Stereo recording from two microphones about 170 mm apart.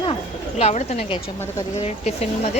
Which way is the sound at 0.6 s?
40° left (ahead or behind).